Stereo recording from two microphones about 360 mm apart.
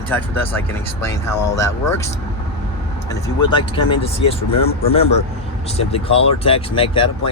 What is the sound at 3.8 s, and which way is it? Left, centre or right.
Speech, centre.